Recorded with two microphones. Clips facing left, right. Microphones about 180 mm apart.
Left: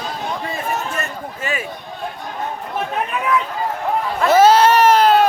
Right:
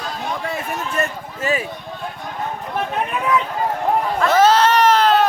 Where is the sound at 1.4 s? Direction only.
35° right (ahead or behind).